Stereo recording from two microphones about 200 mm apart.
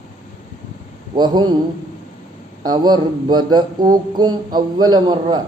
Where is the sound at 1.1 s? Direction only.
20° right (ahead or behind).